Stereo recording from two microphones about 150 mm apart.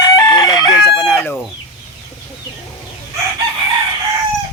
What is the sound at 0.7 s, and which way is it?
Chicken, centre (ahead or behind).